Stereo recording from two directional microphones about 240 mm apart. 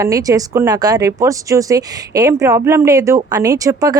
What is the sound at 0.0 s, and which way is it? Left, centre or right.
Speech, centre.